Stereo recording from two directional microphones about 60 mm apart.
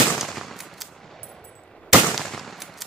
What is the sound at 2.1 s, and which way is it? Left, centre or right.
Machine gun, centre.